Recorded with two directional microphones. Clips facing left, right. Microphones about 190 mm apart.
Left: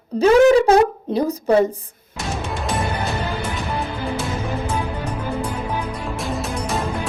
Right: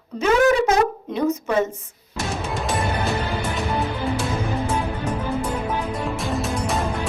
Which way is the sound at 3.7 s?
Centre (ahead or behind).